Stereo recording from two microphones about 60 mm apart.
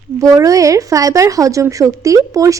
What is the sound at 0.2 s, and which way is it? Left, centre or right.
Speech, right.